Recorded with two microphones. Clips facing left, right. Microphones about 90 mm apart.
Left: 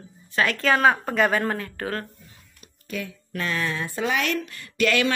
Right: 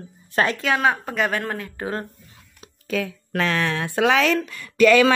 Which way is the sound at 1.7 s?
20° right (ahead or behind).